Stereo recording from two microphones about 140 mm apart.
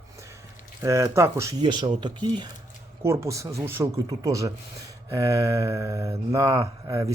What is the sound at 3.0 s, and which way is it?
Mantra, 20° right (ahead or behind).